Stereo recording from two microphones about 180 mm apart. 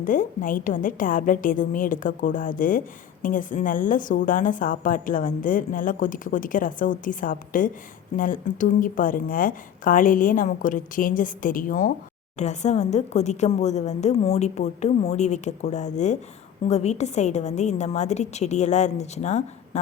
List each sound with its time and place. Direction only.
0.0 s a woman's voice: 45° left (ahead or behind)